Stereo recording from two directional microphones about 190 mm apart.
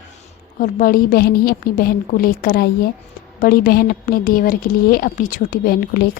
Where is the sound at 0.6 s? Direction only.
45° left (ahead or behind).